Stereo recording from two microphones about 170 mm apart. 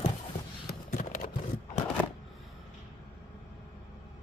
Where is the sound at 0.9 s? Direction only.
50° left (ahead or behind).